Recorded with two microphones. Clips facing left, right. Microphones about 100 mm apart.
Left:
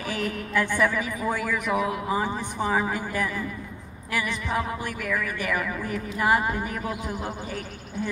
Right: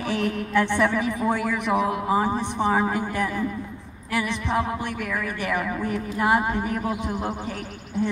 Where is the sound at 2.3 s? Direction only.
20° right (ahead or behind).